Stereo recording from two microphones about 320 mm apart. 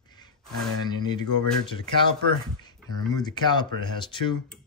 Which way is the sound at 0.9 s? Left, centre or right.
Centre.